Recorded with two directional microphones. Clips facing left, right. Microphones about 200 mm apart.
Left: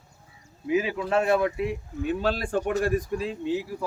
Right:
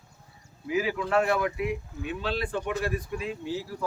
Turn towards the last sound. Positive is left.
turn(degrees=20)  # may be behind; listen again after turning